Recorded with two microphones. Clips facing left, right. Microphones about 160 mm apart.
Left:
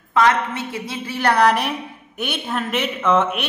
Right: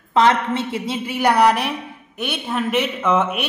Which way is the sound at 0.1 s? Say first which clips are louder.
Right 1 dB; 25° right (ahead or behind).